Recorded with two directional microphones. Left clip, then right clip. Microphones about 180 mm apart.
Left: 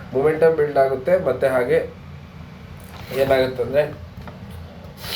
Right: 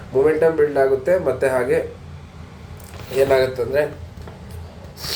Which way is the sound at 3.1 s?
5° right (ahead or behind).